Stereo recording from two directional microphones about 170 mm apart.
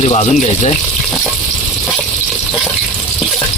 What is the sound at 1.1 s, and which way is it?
Frying, 5° left (ahead or behind).